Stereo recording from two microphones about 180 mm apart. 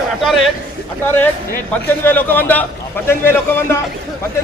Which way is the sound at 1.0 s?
10° left (ahead or behind).